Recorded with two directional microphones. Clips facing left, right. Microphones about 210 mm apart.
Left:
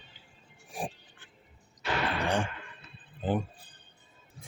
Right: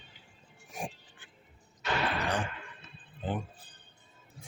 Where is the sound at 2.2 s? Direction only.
25° left (ahead or behind).